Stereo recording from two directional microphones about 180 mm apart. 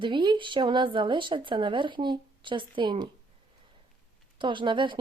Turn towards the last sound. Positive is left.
turn(degrees=-25)  # may be behind; listen again after turning